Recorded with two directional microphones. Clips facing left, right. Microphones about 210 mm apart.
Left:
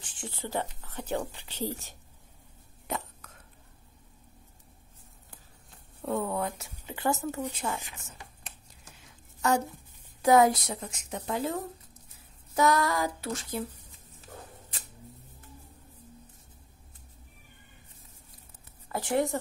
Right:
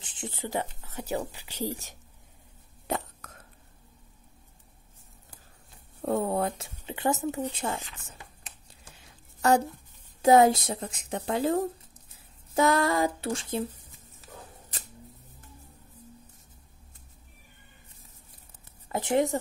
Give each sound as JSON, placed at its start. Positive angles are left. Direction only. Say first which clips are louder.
{"t": 0.0, "sound": "speech", "louder": "right 2 dB", "side_deg": -20}
{"t": 6.0, "sound": "speech", "louder": "right 3 dB", "side_deg": -35}
{"t": 7.5, "sound": "speech", "louder": "right 2 dB", "side_deg": -30}
{"t": 10.2, "sound": "speech", "louder": "right 2 dB", "side_deg": -25}
{"t": 18.9, "sound": "speech", "louder": "right 3 dB", "side_deg": -20}